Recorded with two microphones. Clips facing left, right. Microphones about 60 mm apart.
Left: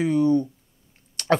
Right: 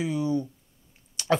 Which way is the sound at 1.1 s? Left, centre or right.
Left.